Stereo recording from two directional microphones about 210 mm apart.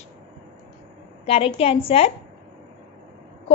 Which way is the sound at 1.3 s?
25° left (ahead or behind).